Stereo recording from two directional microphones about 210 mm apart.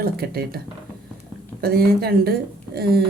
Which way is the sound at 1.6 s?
45° right (ahead or behind).